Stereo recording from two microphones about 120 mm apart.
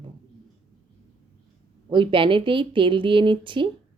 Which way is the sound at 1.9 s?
45° right (ahead or behind).